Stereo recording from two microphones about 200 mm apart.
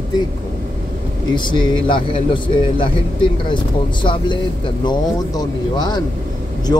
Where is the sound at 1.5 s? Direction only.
25° left (ahead or behind).